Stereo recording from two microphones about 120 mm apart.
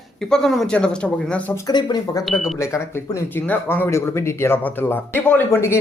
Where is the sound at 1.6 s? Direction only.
35° left (ahead or behind).